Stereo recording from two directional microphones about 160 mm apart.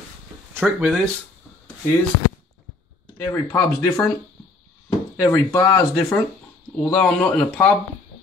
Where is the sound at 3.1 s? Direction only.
20° left (ahead or behind).